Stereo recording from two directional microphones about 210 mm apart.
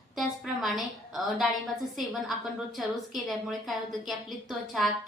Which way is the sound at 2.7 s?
Centre (ahead or behind).